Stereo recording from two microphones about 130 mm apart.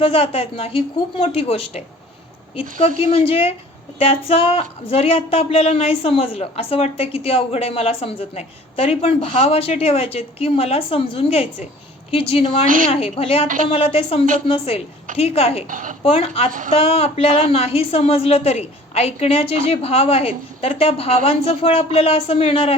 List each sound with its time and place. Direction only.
0.0 s speech: 45° left (ahead or behind)
12.6 s a woman's voice: 90° right
12.9 s speech: 50° left (ahead or behind)
15.7 s a woman's voice: 90° right
16.0 s speech: 45° left (ahead or behind)